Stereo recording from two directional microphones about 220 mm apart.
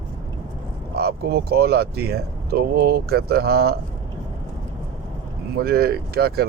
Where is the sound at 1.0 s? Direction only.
45° right (ahead or behind).